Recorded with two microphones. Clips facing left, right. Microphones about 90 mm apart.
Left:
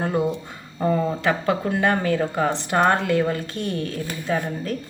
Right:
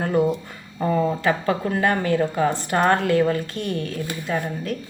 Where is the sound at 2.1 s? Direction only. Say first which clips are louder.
Right 1 dB; 25° left (ahead or behind).